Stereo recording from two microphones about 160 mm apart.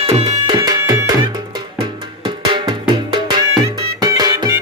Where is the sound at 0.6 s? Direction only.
20° right (ahead or behind).